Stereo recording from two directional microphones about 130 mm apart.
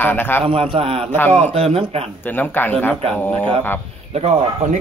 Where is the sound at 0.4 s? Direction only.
45° right (ahead or behind).